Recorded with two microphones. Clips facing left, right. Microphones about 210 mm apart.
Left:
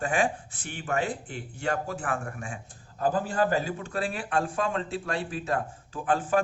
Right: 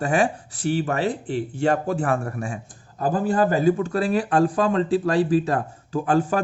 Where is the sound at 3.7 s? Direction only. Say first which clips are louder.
Right 12 dB; 40° right (ahead or behind).